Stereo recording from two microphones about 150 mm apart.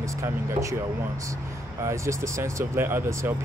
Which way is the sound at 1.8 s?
20° right (ahead or behind).